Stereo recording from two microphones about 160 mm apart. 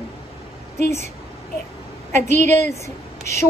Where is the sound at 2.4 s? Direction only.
15° left (ahead or behind).